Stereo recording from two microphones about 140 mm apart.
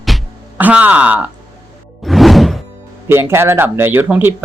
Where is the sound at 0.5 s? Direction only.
10° right (ahead or behind).